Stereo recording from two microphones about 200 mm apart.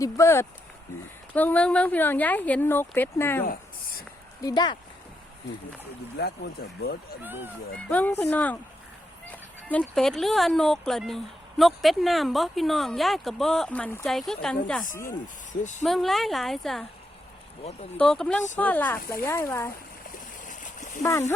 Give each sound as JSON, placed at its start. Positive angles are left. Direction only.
{"t": 0.0, "sound": "speech", "side_deg": 15}
{"t": 4.4, "sound": "speech", "side_deg": 20}
{"t": 6.1, "sound": "speech", "side_deg": 55}
{"t": 7.2, "sound": "speech", "side_deg": -10}
{"t": 7.8, "sound": "speech", "side_deg": 5}
{"t": 9.6, "sound": "speech", "side_deg": 5}
{"t": 17.9, "sound": "speech", "side_deg": 5}
{"t": 20.5, "sound": "splash", "side_deg": 40}
{"t": 21.0, "sound": "speech", "side_deg": 15}